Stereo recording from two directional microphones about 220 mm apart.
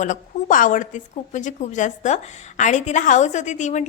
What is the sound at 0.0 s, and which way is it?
Speech, 35° left (ahead or behind).